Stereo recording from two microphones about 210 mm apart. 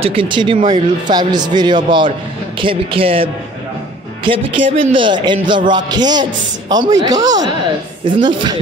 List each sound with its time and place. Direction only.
0.0 s speech: 25° right (ahead or behind)